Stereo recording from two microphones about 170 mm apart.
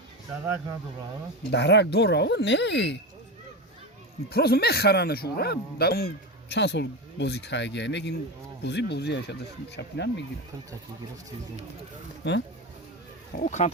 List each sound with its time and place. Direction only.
1.5 s speech: 85° left
4.3 s speech: 65° left (ahead or behind)
6.5 s speech: 85° left
9.7 s speech: 90° left
12.2 s speech: 90° left
13.3 s speech: 45° left (ahead or behind)